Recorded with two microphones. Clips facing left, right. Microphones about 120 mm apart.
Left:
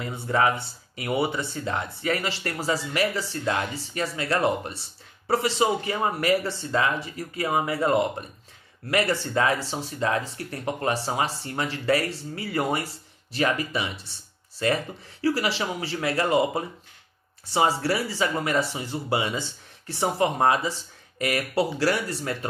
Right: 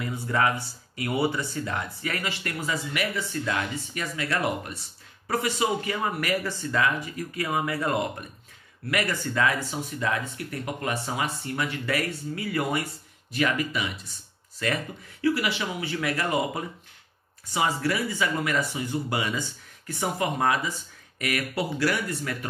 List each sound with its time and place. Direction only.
0.0 s speech: 25° left (ahead or behind)
15.2 s speech: 35° left (ahead or behind)